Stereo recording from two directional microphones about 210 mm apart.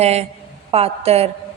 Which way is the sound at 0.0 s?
30° right (ahead or behind).